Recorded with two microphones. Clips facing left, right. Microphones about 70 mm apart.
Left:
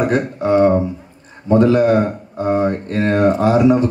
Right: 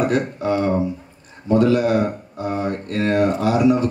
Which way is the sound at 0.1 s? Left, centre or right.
Left.